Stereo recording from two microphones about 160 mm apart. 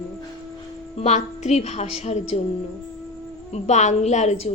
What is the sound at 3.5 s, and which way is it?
Speech, 45° left (ahead or behind).